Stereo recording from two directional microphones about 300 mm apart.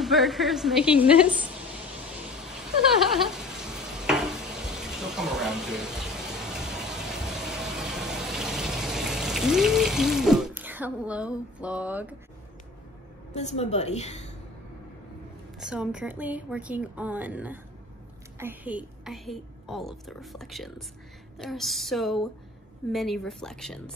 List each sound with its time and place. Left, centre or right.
0.0 s a woman's voice: centre
3.2 s stir: centre
13.3 s a woman's voice: left
15.6 s a woman's voice: centre